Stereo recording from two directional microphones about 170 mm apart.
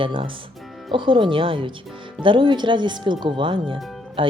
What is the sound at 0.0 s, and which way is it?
Speech, 30° right (ahead or behind).